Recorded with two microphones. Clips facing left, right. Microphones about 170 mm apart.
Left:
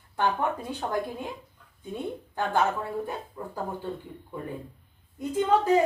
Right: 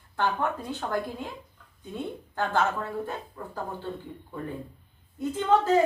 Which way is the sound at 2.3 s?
15° left (ahead or behind).